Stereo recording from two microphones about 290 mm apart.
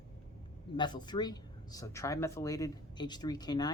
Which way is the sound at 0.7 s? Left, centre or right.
Centre.